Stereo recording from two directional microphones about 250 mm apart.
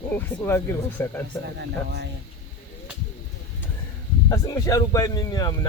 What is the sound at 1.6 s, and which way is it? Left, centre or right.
Speech, right.